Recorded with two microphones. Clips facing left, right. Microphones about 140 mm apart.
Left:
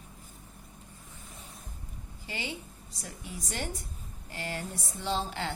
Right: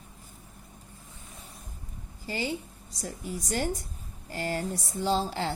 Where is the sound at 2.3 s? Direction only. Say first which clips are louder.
Right 7 dB; 40° right (ahead or behind).